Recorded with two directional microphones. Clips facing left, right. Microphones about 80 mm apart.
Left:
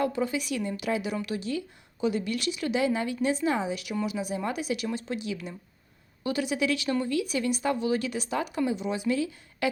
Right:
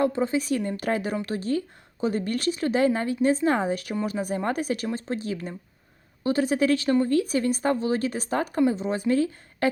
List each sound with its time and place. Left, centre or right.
0.0 s speech: right